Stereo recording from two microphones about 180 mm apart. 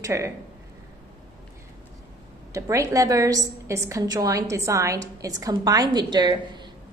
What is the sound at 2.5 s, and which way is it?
A woman's voice, 15° right (ahead or behind).